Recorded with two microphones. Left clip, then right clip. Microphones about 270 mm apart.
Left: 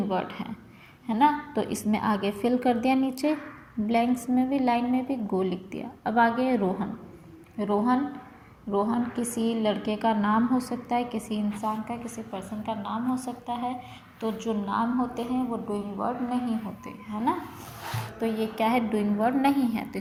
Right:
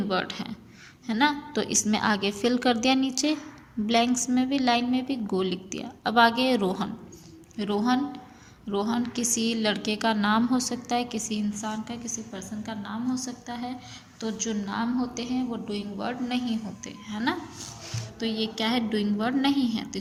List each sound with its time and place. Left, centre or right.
0.1 s a woman's voice: right